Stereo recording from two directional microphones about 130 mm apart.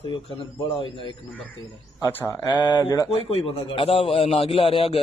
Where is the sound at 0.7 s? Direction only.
40° left (ahead or behind).